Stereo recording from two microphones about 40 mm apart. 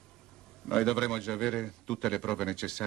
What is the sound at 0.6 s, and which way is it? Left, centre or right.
Speech, centre.